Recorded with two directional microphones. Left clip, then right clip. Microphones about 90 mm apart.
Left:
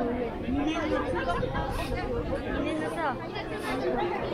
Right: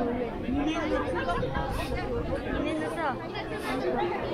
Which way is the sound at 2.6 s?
55° right (ahead or behind).